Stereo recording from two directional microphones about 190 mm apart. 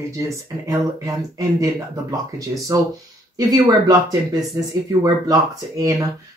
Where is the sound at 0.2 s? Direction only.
20° right (ahead or behind).